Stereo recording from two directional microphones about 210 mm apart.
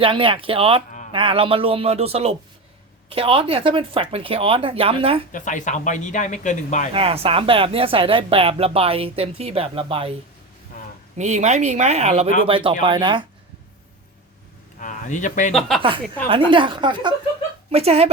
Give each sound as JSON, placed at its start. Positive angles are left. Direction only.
{"t": 0.0, "sound": "speech", "side_deg": -25}
{"t": 0.9, "sound": "a sound", "side_deg": 35}
{"t": 1.1, "sound": "speech", "side_deg": -25}
{"t": 5.3, "sound": "speech", "side_deg": 35}
{"t": 6.9, "sound": "speech", "side_deg": -30}
{"t": 11.2, "sound": "speech", "side_deg": -35}
{"t": 14.8, "sound": "speech", "side_deg": 35}
{"t": 15.8, "sound": "speech", "side_deg": -25}